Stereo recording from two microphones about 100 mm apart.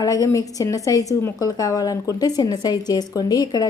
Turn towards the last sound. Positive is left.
turn(degrees=40)  # may be behind; listen again after turning